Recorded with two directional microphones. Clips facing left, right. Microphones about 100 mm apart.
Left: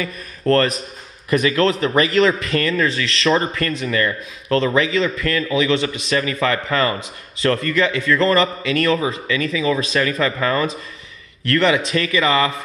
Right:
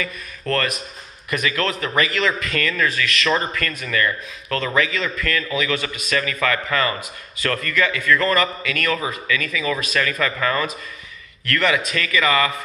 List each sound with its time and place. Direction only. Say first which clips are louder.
0.0 s a man's voice: left 5 dB; 30° left (ahead or behind)